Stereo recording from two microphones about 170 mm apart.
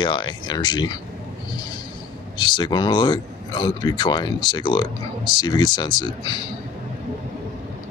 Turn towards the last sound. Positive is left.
turn(degrees=25)  # may be behind; listen again after turning